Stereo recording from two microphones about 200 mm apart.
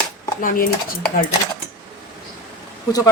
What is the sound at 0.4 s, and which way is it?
Dishes, 45° left (ahead or behind).